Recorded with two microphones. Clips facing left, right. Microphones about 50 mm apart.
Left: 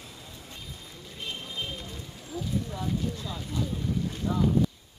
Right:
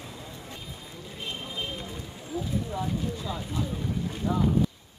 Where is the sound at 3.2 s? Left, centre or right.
Centre.